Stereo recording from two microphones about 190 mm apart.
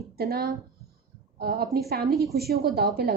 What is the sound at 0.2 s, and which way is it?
A woman's voice, 55° right (ahead or behind).